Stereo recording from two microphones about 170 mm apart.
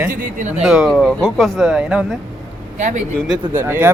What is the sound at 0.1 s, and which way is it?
Speech, 50° right (ahead or behind).